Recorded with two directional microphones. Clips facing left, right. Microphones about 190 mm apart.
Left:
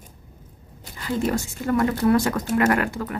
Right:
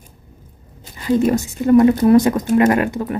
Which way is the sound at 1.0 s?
20° right (ahead or behind).